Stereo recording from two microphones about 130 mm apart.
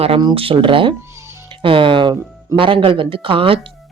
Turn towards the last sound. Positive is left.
turn(degrees=-45)  # may be behind; listen again after turning